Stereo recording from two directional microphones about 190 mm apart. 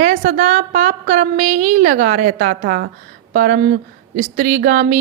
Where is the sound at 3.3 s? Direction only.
40° right (ahead or behind).